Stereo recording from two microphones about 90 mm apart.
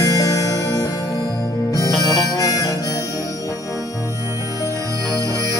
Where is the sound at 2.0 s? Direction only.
40° left (ahead or behind).